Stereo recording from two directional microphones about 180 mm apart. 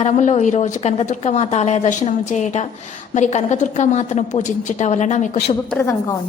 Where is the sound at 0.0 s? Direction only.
40° left (ahead or behind).